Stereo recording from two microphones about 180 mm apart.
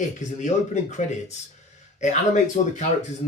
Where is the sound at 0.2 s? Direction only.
40° left (ahead or behind).